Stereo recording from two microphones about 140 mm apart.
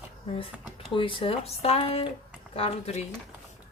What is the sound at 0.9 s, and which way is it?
A woman's voice, 40° left (ahead or behind).